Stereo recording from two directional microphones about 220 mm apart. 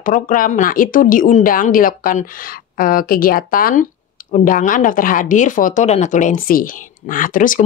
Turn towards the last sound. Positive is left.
turn(degrees=35)  # may be behind; listen again after turning